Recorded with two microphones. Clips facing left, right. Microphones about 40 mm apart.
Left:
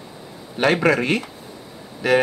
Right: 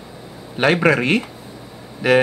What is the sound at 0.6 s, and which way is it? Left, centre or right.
Speech, centre.